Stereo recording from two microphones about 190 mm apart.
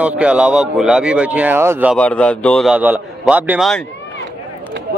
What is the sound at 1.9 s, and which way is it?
Speech, 5° left (ahead or behind).